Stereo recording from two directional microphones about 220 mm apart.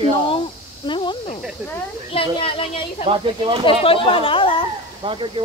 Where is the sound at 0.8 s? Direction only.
20° left (ahead or behind).